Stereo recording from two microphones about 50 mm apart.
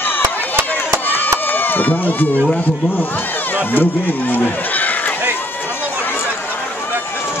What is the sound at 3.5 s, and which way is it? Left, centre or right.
Speech, left.